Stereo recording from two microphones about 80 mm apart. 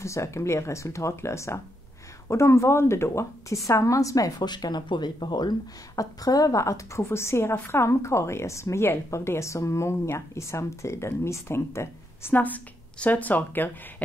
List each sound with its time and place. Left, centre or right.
0.0 s a woman's voice: left
4.4 s speech: left
5.9 s a woman's voice: left
12.4 s a woman's voice: centre